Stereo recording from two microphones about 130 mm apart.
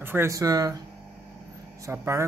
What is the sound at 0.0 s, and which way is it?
Speech, 20° right (ahead or behind).